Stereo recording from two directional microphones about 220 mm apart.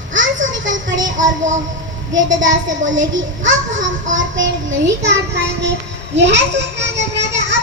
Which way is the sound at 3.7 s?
35° right (ahead or behind).